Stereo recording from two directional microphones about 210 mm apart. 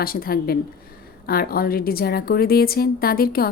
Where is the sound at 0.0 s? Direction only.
45° left (ahead or behind).